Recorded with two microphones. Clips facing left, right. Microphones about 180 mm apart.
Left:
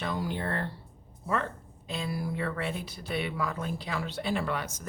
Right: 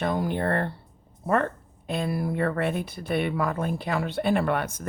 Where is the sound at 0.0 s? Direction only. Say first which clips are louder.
Right 7 dB; 55° right (ahead or behind).